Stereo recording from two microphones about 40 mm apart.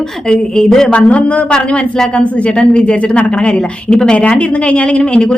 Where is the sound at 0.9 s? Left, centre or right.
Left.